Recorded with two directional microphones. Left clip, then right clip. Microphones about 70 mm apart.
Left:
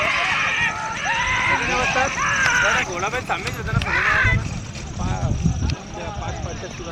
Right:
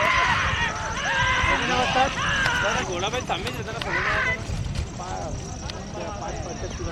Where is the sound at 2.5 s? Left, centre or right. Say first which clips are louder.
Left 6 dB; right.